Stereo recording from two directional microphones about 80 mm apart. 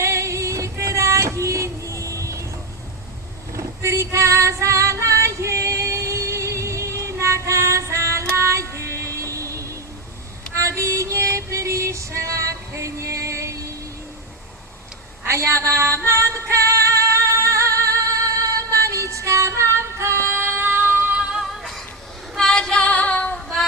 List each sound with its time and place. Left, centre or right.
0.0 s female singing: right
3.5 s female singing: right
10.6 s music: right
15.3 s music: right
21.6 s music: centre
22.4 s female singing: centre